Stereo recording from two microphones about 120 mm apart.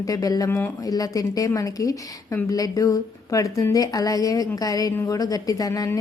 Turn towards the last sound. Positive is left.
turn(degrees=30)  # may be behind; listen again after turning